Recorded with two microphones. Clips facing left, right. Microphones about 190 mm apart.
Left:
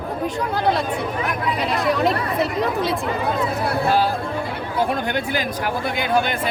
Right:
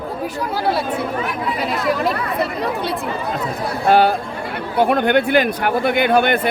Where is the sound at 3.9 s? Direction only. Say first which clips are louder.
Right 10 dB; 65° right (ahead or behind).